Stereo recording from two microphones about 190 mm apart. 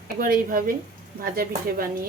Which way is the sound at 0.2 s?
45° right (ahead or behind).